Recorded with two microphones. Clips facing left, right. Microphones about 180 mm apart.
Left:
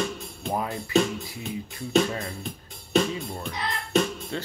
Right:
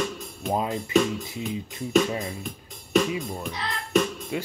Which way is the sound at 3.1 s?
10° right (ahead or behind).